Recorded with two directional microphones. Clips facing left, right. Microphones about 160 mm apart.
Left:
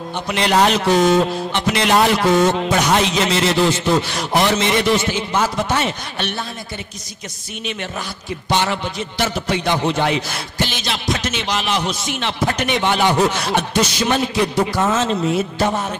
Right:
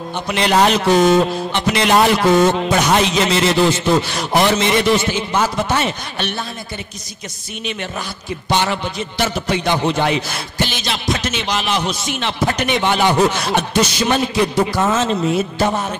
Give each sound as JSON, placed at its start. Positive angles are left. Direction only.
{"t": 0.1, "sound": "speech", "side_deg": -15}
{"t": 8.5, "sound": "speech", "side_deg": -10}
{"t": 15.1, "sound": "a man's voice", "side_deg": -25}